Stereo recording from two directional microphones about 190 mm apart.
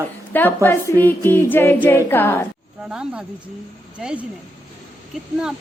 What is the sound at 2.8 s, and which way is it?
Speech, 5° right (ahead or behind).